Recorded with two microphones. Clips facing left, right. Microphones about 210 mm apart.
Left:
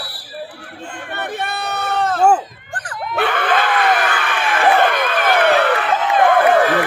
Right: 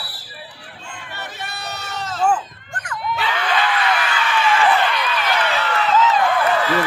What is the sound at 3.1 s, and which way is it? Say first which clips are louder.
Crowd: left 5 dB; 55° left (ahead or behind).